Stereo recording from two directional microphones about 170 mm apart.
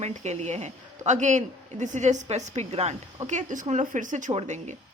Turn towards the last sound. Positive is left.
turn(degrees=-45)  # may be behind; listen again after turning